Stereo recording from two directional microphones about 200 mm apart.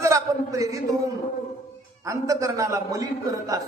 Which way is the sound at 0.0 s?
15° right (ahead or behind).